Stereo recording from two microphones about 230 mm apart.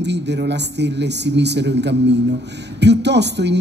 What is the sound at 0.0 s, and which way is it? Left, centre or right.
A woman's voice, right.